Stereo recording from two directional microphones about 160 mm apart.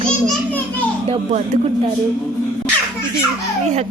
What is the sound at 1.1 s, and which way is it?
Speech, 45° right (ahead or behind).